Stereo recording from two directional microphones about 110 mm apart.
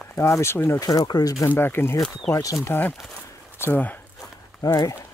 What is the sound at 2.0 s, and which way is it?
Speech, 10° left (ahead or behind).